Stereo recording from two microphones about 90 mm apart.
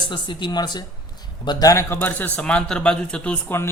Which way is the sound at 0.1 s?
60° left (ahead or behind).